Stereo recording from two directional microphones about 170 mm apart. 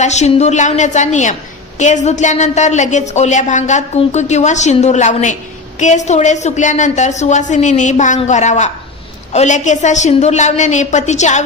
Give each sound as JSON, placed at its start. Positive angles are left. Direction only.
{"t": 0.0, "sound": "a woman's voice", "side_deg": 40}